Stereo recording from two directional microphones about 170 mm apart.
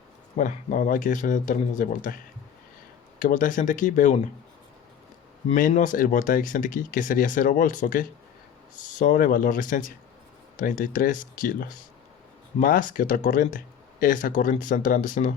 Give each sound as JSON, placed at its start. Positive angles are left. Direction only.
{"t": 0.3, "sound": "speech", "side_deg": 50}
{"t": 3.2, "sound": "speech", "side_deg": 50}
{"t": 5.5, "sound": "speech", "side_deg": 45}